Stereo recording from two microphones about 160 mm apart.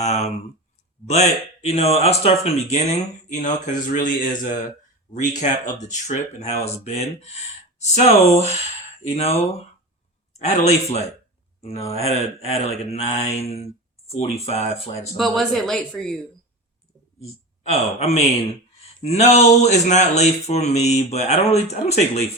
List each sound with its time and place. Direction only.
0.0 s speech: 45° left (ahead or behind)
15.2 s speech: centre (ahead or behind)
17.7 s speech: 40° left (ahead or behind)